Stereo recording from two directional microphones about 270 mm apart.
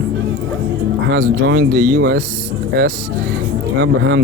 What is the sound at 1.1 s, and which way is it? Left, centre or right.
Speech, right.